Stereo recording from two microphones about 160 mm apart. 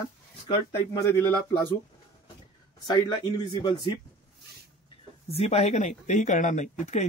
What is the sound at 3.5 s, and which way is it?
Speech, 25° left (ahead or behind).